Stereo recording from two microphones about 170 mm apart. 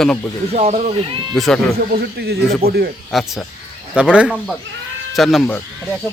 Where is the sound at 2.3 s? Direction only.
65° right (ahead or behind).